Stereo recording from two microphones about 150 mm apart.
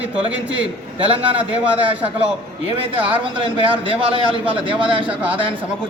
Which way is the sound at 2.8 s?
35° right (ahead or behind).